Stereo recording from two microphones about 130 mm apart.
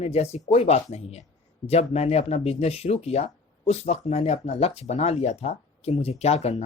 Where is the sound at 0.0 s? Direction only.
55° left (ahead or behind).